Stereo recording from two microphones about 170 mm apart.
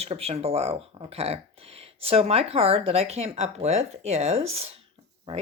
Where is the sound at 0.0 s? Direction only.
35° right (ahead or behind).